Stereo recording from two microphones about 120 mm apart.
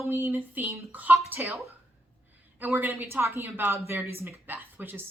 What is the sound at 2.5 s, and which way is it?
A woman's voice, 15° right (ahead or behind).